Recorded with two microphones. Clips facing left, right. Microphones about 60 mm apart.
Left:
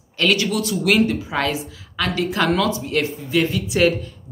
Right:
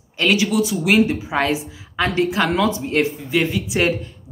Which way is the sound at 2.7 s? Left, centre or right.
Right.